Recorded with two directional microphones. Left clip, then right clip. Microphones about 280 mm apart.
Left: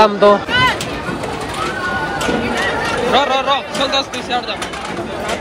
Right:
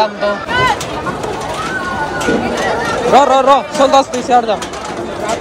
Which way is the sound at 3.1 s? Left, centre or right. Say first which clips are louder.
Right 7 dB; centre.